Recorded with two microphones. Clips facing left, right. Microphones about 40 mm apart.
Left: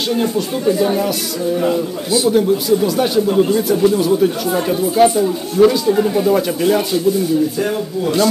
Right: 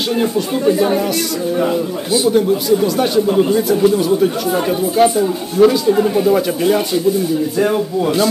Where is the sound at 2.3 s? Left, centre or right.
Centre.